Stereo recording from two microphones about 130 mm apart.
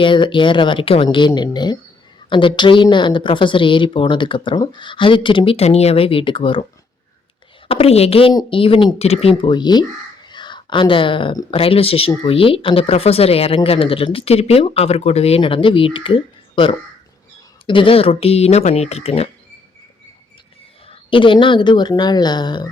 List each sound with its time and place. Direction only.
0.0 s a woman's voice: 40° left (ahead or behind)
7.7 s speech: 50° left (ahead or behind)
8.3 s speech: 35° left (ahead or behind)
9.5 s a woman's voice: 35° left (ahead or behind)
10.2 s a sound: 35° left (ahead or behind)
11.5 s speech: 45° left (ahead or behind)
21.1 s a woman's voice: 40° left (ahead or behind)